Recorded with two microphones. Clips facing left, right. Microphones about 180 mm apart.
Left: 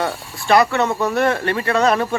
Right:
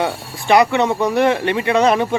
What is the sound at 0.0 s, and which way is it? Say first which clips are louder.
Speech: right 2 dB; 15° right (ahead or behind).